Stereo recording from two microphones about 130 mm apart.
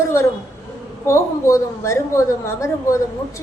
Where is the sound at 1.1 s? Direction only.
20° left (ahead or behind).